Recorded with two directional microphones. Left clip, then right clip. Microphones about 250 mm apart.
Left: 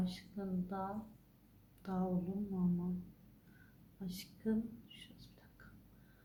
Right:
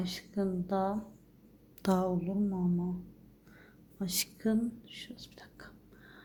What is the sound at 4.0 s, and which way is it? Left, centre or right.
A woman's voice, right.